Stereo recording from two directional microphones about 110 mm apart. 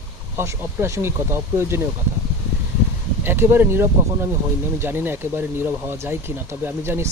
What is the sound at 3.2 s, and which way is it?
Speech, 20° right (ahead or behind).